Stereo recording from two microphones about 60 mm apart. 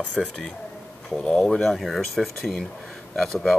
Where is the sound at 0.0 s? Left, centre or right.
Left.